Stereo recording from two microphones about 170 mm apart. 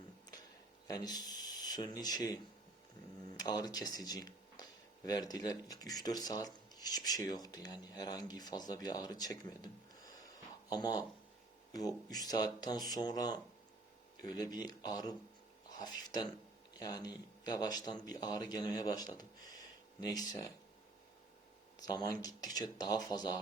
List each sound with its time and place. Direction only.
0.9 s speech: 20° left (ahead or behind)
3.3 s speech: 25° left (ahead or behind)
21.8 s speech: 25° left (ahead or behind)